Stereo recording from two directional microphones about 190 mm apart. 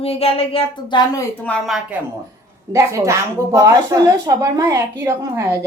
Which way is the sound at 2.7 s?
15° right (ahead or behind).